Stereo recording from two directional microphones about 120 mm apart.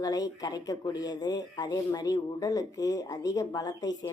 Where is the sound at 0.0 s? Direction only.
30° left (ahead or behind).